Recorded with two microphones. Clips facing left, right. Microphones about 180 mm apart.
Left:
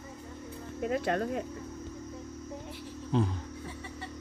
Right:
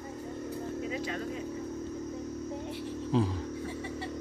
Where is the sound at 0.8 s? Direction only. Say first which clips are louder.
Left 9 dB; 55° left (ahead or behind).